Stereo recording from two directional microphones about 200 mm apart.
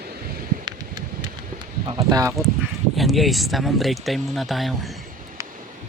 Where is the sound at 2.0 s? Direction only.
15° right (ahead or behind).